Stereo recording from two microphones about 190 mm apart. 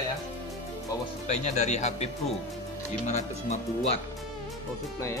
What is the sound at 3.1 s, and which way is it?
Speech, 35° left (ahead or behind).